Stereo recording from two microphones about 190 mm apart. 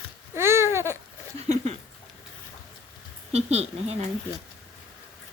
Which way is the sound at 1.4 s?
35° right (ahead or behind).